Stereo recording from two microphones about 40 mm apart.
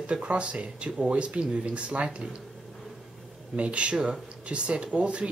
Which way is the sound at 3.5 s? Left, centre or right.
Right.